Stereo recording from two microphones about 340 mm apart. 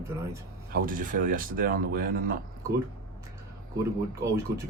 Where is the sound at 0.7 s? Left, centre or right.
Right.